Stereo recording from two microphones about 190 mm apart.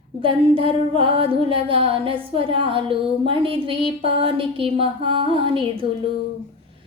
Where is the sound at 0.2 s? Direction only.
30° right (ahead or behind).